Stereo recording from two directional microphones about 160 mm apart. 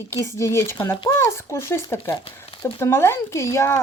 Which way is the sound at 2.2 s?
35° left (ahead or behind).